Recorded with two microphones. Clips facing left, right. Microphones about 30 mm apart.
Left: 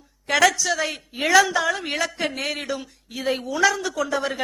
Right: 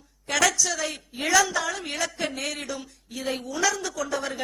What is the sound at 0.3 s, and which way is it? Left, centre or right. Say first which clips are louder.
A woman's voice: left 5 dB; centre.